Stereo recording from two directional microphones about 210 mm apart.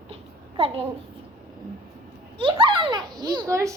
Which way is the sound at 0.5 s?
25° right (ahead or behind).